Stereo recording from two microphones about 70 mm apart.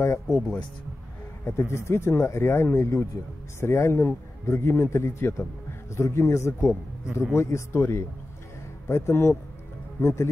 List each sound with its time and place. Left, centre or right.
0.0 s speech: left
1.7 s speech: left